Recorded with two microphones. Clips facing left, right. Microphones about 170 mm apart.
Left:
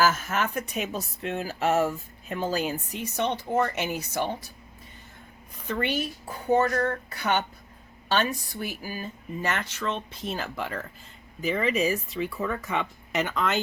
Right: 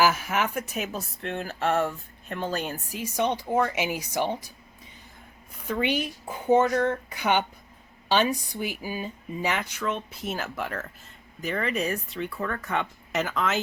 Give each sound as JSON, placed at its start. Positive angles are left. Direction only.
{"t": 0.0, "sound": "speech", "side_deg": -10}
{"t": 3.0, "sound": "speech", "side_deg": -10}
{"t": 5.6, "sound": "speech", "side_deg": -10}